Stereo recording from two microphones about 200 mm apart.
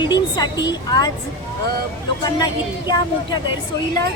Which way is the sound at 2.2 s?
20° left (ahead or behind).